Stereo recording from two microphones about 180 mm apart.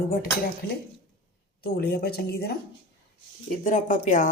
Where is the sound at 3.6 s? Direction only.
50° left (ahead or behind).